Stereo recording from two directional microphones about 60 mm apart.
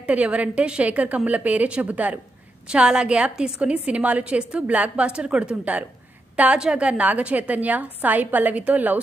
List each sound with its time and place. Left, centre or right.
0.0 s a woman's voice: right
2.7 s a woman's voice: centre